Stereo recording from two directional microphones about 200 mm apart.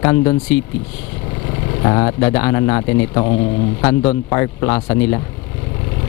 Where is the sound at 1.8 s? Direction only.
20° left (ahead or behind).